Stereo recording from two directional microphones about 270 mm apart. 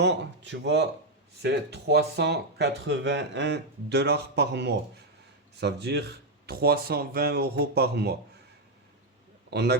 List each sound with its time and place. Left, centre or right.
0.0 s speech: right
9.5 s a man's voice: right